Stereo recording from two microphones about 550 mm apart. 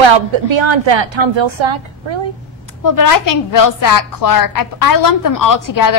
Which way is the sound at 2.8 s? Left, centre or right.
Left.